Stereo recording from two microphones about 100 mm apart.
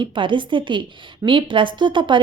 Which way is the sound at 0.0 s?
55° right (ahead or behind).